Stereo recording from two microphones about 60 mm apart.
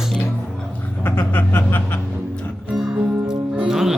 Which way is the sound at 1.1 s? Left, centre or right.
Left.